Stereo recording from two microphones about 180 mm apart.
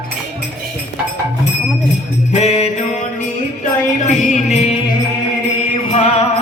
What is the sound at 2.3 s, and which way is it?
Music, 35° left (ahead or behind).